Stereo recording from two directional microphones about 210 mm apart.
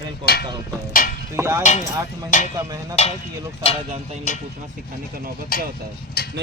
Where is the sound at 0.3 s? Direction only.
45° left (ahead or behind).